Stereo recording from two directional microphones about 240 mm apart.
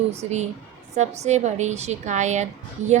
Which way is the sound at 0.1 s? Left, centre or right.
Right.